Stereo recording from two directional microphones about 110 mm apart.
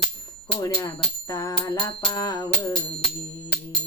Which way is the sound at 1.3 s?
35° left (ahead or behind).